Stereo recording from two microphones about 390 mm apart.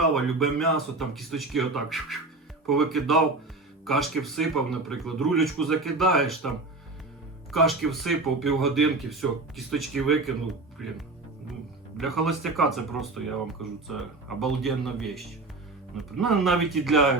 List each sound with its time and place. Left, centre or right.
0.1 s speech: centre
7.5 s speech: centre
12.2 s speech: centre